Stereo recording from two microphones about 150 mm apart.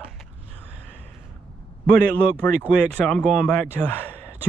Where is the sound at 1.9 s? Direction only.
75° right (ahead or behind).